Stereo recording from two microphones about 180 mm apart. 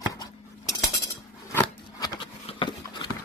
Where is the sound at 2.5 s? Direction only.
25° left (ahead or behind).